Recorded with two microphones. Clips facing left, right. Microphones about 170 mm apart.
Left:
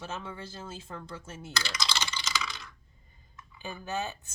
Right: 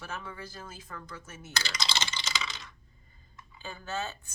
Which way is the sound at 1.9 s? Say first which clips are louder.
Right 1 dB; 20° right (ahead or behind).